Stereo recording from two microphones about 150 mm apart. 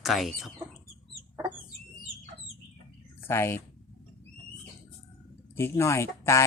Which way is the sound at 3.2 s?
15° left (ahead or behind).